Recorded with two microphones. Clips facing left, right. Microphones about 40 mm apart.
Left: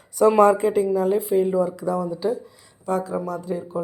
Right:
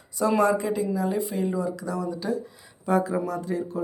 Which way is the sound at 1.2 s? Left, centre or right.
Centre.